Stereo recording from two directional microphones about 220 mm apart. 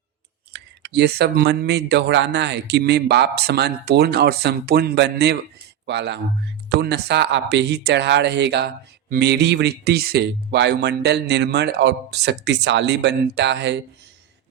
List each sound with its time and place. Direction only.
0.5 s speech: 50° right (ahead or behind)